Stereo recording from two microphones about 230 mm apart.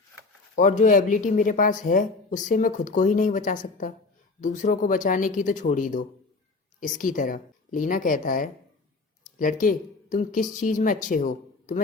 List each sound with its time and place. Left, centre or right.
0.5 s speech: left